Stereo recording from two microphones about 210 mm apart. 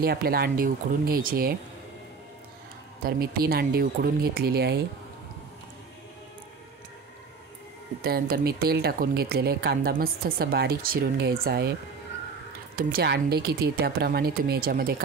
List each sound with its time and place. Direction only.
0.0 s speech: 45° right (ahead or behind)
3.0 s speech: 45° right (ahead or behind)
8.0 s speech: 45° right (ahead or behind)
12.7 s speech: 50° right (ahead or behind)